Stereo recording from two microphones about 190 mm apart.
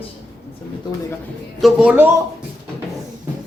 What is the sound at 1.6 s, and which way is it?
Speech, 5° right (ahead or behind).